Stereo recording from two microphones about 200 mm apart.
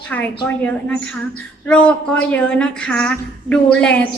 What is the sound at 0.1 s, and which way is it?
A child's voice, 5° left (ahead or behind).